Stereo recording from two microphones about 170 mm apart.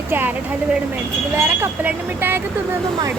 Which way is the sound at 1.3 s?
15° right (ahead or behind).